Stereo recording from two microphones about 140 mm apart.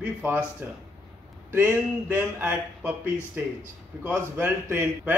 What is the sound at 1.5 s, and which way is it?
A man's voice, 15° right (ahead or behind).